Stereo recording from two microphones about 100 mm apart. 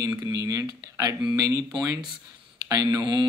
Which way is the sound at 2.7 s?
40° right (ahead or behind).